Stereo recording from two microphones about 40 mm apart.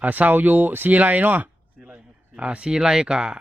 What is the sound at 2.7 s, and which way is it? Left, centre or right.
Speech, centre.